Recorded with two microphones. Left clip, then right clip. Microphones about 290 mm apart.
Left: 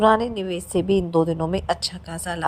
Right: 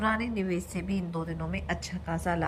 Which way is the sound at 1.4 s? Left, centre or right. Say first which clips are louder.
Left 11 dB; left.